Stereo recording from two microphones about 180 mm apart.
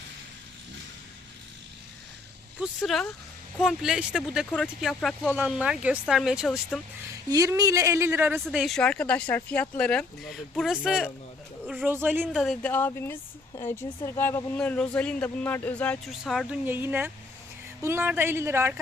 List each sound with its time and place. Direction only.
2.6 s speech: centre (ahead or behind)
5.4 s speech: 5° right (ahead or behind)
7.3 s speech: 20° right (ahead or behind)
8.4 s speech: centre (ahead or behind)
12.3 s speech: centre (ahead or behind)
12.7 s a woman's voice: 10° left (ahead or behind)
16.6 s speech: 10° right (ahead or behind)